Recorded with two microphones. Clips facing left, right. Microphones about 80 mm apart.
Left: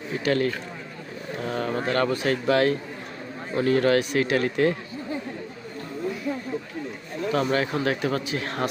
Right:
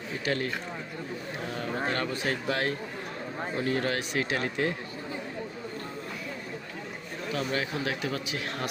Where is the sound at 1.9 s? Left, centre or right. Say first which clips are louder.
Left 9 dB; left.